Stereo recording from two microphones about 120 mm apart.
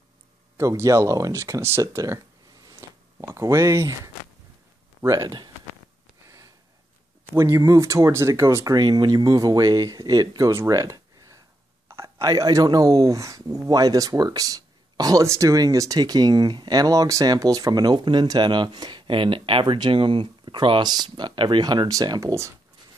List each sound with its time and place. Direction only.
0.6 s speech: 25° right (ahead or behind)
2.8 s a sound: 25° right (ahead or behind)
3.2 s speech: 25° right (ahead or behind)
6.2 s a sound: 25° right (ahead or behind)
7.3 s speech: 25° right (ahead or behind)
8.7 s speech: 35° right (ahead or behind)